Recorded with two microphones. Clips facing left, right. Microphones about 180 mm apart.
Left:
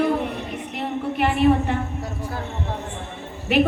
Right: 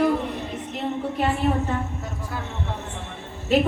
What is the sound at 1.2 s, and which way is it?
Speech, 75° left (ahead or behind).